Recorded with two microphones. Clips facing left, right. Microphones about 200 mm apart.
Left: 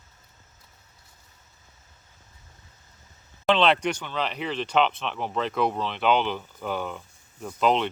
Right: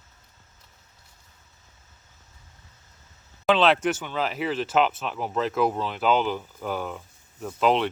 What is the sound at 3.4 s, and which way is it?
Speech, 5° right (ahead or behind).